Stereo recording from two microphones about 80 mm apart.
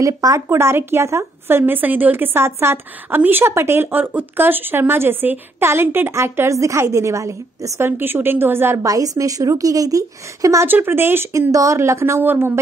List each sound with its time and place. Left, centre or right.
0.0 s a woman's voice: right
0.5 s a woman's voice: right
8.0 s a woman's voice: right
8.8 s a woman's voice: right
10.7 s a woman's voice: right
11.5 s speech: right